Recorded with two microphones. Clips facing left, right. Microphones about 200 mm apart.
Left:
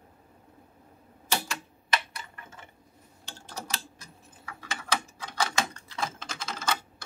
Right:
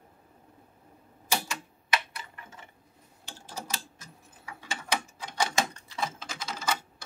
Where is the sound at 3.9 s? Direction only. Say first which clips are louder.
Left 1 dB; 15° right (ahead or behind).